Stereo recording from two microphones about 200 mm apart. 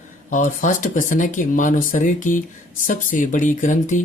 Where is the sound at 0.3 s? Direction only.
40° left (ahead or behind).